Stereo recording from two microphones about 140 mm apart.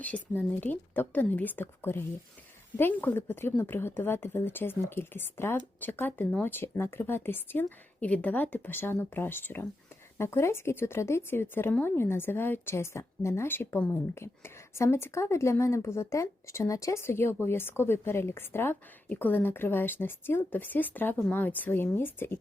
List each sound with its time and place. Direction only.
0.0 s a woman's voice: 10° left (ahead or behind)